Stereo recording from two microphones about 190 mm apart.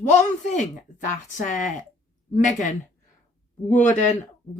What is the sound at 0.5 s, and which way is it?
Speech, 40° left (ahead or behind).